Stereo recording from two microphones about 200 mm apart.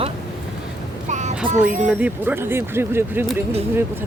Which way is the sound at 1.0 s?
35° right (ahead or behind).